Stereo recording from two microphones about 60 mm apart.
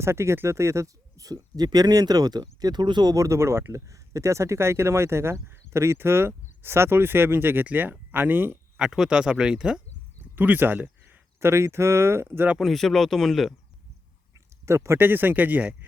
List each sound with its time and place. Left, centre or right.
0.0 s speech: right
3.2 s speech: right
8.8 s speech: centre
10.3 s speech: right
11.3 s speech: right
12.5 s speech: centre
14.3 s a sound: right
14.9 s speech: right